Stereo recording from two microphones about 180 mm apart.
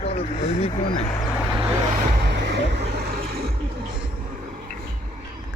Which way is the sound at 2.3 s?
70° right (ahead or behind).